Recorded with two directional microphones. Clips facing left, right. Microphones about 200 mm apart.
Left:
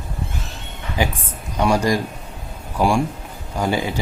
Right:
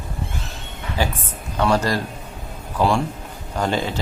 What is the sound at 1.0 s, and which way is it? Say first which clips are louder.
Speech: left 2 dB; 15° left (ahead or behind).